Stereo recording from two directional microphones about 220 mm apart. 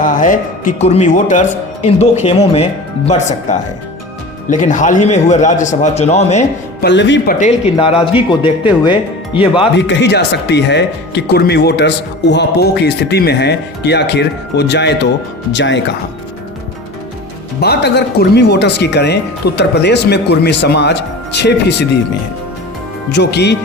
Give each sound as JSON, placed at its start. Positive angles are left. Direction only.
{"t": 0.0, "sound": "a man's voice", "side_deg": 35}
{"t": 6.8, "sound": "speech", "side_deg": 55}
{"t": 7.3, "sound": "speech", "side_deg": 30}
{"t": 9.7, "sound": "speech", "side_deg": 55}
{"t": 17.6, "sound": "speech", "side_deg": 50}
{"t": 23.1, "sound": "speech", "side_deg": 50}